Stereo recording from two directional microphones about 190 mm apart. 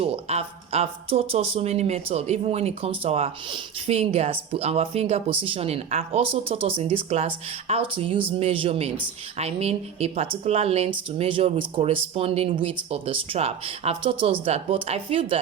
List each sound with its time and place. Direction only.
0.0 s speech: 35° right (ahead or behind)